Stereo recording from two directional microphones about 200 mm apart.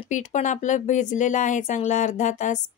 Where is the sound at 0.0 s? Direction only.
35° left (ahead or behind).